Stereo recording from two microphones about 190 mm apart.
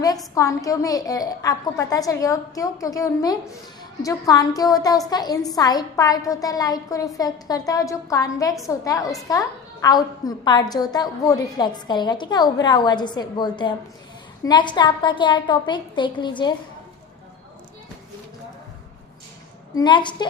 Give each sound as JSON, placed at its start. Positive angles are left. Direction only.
{"t": 0.3, "sound": "a woman's voice", "side_deg": 15}
{"t": 19.7, "sound": "a woman's voice", "side_deg": 25}